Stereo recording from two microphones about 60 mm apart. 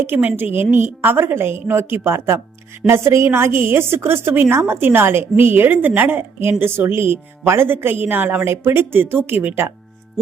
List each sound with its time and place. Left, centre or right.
0.0 s a woman's voice: right
8.4 s a woman's voice: right